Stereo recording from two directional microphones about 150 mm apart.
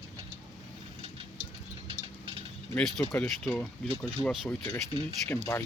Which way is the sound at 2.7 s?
5° left (ahead or behind).